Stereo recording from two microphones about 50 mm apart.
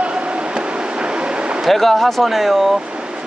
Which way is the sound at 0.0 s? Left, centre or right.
Right.